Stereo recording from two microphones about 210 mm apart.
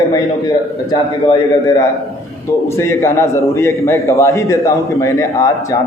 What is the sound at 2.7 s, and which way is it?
A man's voice, 15° left (ahead or behind).